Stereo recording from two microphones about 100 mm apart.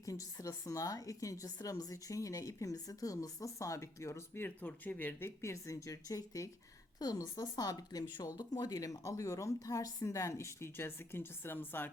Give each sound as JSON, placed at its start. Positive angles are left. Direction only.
{"t": 0.0, "sound": "speech", "side_deg": 35}